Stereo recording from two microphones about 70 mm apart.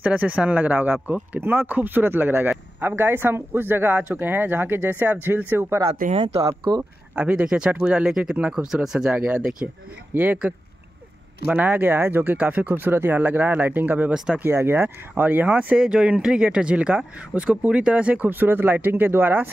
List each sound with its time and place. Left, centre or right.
0.0 s speech: centre; by 5.8 s right
6.3 s speech: right
7.2 s speech: centre
9.1 s speech: centre
11.5 s speech: right
14.1 s speech: centre
14.4 s speech: right; by 18.3 s centre
18.3 s speech: right